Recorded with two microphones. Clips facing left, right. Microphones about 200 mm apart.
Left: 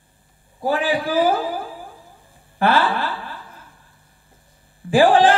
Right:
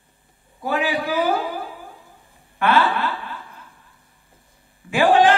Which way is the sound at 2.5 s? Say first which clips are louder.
Left 1 dB; 30° left (ahead or behind).